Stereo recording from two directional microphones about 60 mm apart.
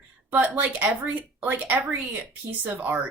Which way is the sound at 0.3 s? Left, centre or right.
Right.